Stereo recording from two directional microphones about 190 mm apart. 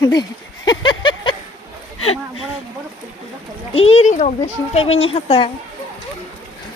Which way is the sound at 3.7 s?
30° left (ahead or behind).